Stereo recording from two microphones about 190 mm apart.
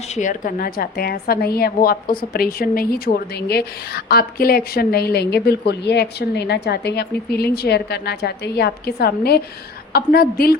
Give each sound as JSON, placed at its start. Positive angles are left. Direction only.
{"t": 0.1, "sound": "a woman's voice", "side_deg": 40}